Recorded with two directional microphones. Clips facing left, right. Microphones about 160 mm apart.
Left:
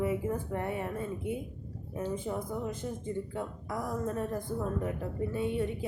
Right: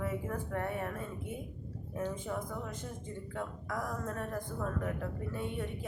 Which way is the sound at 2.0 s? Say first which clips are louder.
Left 3 dB; 20° left (ahead or behind).